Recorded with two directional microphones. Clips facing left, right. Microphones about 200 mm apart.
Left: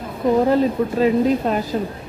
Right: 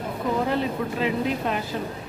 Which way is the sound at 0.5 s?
40° left (ahead or behind).